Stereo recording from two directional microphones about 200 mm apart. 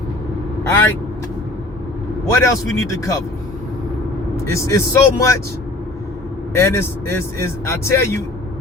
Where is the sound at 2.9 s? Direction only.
15° left (ahead or behind).